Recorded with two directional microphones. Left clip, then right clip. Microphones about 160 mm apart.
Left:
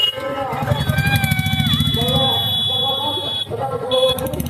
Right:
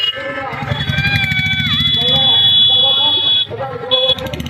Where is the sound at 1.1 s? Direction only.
80° left.